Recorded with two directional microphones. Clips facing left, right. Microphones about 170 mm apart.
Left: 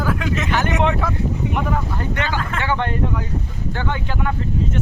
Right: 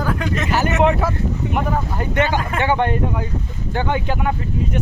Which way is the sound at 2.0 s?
15° right (ahead or behind).